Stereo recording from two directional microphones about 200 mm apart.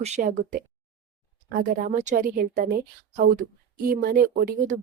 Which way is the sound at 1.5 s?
45° right (ahead or behind).